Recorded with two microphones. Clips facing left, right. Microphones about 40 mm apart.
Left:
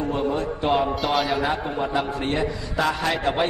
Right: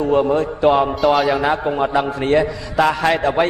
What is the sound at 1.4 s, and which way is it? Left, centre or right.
A man's voice, right.